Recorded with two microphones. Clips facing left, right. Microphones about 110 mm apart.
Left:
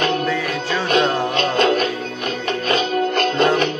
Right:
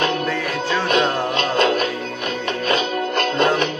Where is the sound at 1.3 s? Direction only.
40° left (ahead or behind).